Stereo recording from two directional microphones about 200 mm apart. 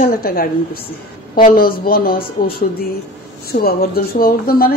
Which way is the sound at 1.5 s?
45° left (ahead or behind).